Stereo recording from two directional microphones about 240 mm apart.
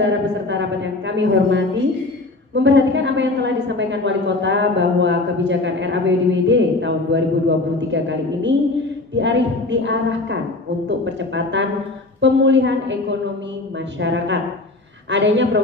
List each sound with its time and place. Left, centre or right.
0.0 s a sound: right
2.5 s a woman's voice: right
14.0 s a woman's voice: right